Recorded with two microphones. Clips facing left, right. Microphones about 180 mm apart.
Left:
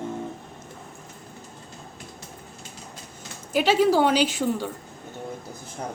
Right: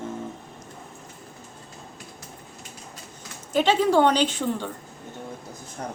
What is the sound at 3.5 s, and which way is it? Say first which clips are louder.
A woman's voice: even; 10° left (ahead or behind).